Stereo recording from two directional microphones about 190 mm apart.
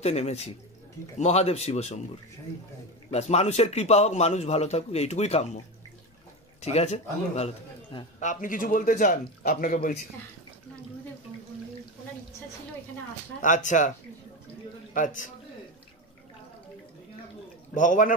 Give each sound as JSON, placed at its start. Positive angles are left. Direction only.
{"t": 0.0, "sound": "a man's voice", "side_deg": 35}
{"t": 3.1, "sound": "a man's voice", "side_deg": 35}
{"t": 6.6, "sound": "a man's voice", "side_deg": 35}
{"t": 13.4, "sound": "a man's voice", "side_deg": 40}
{"t": 15.0, "sound": "a man's voice", "side_deg": 45}
{"t": 17.7, "sound": "a man's voice", "side_deg": 45}